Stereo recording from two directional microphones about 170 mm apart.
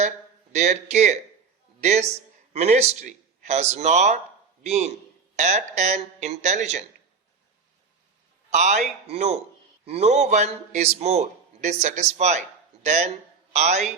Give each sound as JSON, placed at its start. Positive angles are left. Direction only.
{"t": 0.5, "sound": "a man's voice", "side_deg": -40}
{"t": 8.4, "sound": "a man's voice", "side_deg": -45}